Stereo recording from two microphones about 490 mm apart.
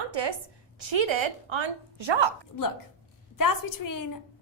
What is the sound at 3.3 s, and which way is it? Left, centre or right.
Speech, left.